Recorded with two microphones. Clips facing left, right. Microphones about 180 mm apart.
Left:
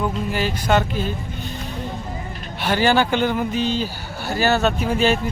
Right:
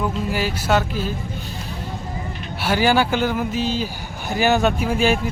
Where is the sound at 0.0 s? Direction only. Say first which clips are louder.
Even; 5° right (ahead or behind).